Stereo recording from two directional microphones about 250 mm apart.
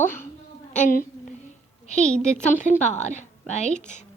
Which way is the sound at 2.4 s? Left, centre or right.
Left.